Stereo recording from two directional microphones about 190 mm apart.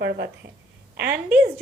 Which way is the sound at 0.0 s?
55° right (ahead or behind).